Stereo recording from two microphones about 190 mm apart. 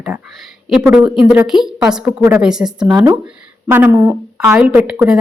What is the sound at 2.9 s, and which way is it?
A woman's voice, 20° right (ahead or behind).